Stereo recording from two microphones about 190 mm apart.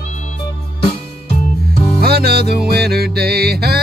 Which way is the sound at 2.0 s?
55° right (ahead or behind).